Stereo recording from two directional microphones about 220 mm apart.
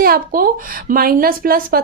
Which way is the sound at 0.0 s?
40° right (ahead or behind).